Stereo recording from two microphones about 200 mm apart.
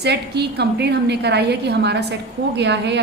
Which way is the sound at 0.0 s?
55° right (ahead or behind).